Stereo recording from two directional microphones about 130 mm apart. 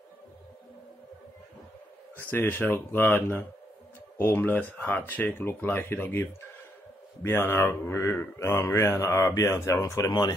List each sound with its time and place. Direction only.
2.3 s speech: 15° left (ahead or behind)
7.2 s speech: 20° left (ahead or behind)